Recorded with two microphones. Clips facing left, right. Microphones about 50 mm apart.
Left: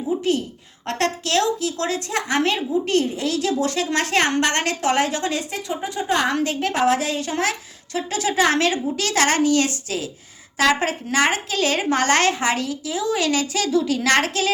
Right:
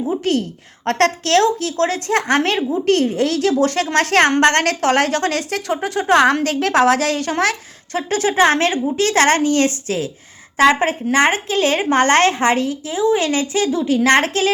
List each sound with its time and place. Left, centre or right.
0.2 s a woman's voice: right